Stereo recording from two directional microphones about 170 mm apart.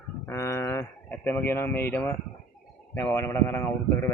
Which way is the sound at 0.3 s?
15° left (ahead or behind).